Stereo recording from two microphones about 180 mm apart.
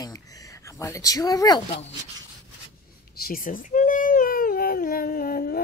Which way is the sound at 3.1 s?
55° left (ahead or behind).